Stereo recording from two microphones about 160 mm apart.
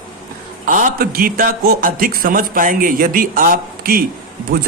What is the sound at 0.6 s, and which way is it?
A man's voice, 55° right (ahead or behind).